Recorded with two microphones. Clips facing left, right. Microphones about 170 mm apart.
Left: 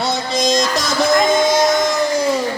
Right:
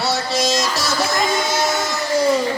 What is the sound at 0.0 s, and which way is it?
Music, 5° right (ahead or behind).